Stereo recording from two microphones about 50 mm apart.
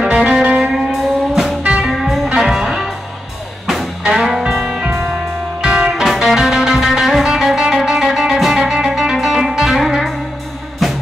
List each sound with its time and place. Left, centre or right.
0.0 s music: centre
1.3 s music: centre
1.6 s music: right
1.9 s music: centre
4.1 s music: centre
6.1 s music: centre